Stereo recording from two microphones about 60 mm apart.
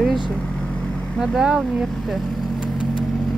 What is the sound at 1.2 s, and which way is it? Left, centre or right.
Speech, centre.